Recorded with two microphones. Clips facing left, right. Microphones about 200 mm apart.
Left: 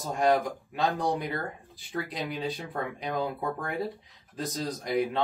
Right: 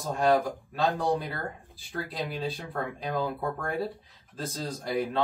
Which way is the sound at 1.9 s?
15° left (ahead or behind).